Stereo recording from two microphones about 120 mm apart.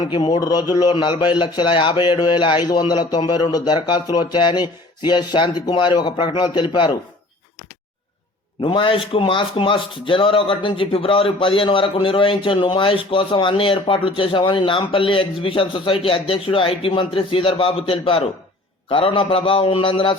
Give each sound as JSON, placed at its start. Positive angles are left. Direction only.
{"t": 0.0, "sound": "a man's voice", "side_deg": 35}
{"t": 8.6, "sound": "speech", "side_deg": 45}